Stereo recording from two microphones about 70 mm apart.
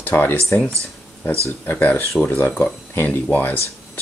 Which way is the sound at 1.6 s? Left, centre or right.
Left.